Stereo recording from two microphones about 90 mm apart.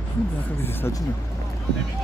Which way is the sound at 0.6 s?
25° left (ahead or behind).